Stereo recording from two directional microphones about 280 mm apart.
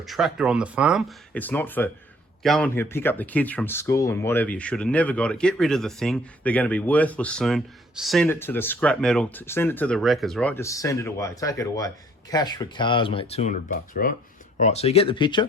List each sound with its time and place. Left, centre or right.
0.0 s speech: centre